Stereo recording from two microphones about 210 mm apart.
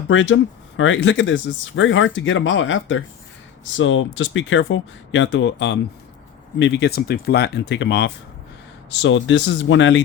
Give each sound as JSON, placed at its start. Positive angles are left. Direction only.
{"t": 0.1, "sound": "speech", "side_deg": 65}